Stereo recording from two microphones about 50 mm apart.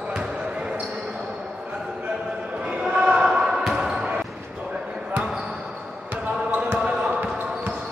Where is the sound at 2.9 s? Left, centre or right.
Centre.